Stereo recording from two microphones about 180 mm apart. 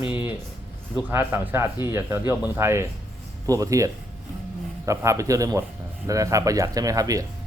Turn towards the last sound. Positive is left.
turn(degrees=-20)  # may be behind; listen again after turning